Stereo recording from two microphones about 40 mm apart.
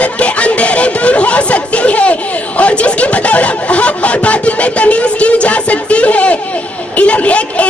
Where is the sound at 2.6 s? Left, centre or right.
Left.